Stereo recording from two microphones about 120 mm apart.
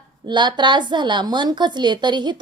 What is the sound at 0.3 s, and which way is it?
Speech, 40° right (ahead or behind).